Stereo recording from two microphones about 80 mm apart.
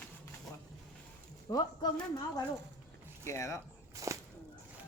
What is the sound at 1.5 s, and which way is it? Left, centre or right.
Speech, left.